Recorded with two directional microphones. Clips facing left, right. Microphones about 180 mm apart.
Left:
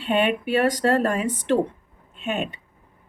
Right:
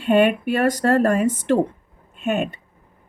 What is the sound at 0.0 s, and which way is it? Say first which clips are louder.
Speech: right 5 dB; 45° right (ahead or behind).